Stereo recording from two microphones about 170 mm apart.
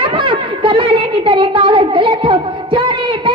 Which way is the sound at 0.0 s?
30° right (ahead or behind).